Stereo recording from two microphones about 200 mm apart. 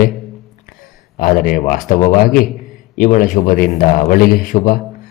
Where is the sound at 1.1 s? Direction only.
45° left (ahead or behind).